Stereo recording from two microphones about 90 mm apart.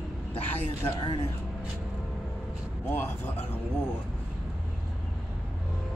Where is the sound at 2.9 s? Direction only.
20° left (ahead or behind).